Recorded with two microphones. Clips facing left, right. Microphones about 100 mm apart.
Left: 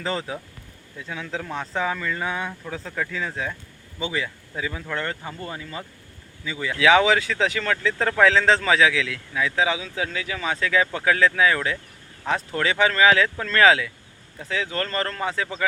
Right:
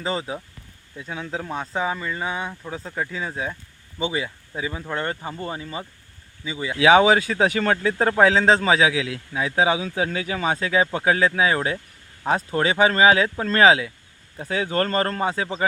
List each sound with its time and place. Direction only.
0.0 s speech: 10° right (ahead or behind)
0.9 s speech: 25° right (ahead or behind)
1.5 s speech: 10° right (ahead or behind)
14.3 s speech: 35° right (ahead or behind)